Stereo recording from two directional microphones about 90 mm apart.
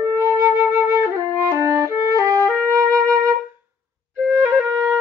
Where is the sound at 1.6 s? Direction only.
35° right (ahead or behind).